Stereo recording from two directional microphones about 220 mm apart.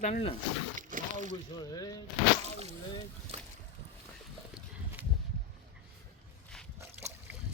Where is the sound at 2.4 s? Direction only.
30° right (ahead or behind).